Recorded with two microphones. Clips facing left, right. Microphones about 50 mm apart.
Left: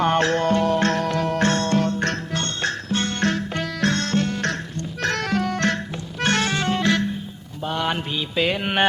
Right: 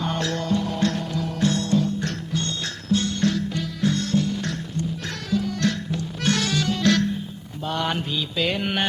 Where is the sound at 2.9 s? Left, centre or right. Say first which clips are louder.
Right 3 dB; left.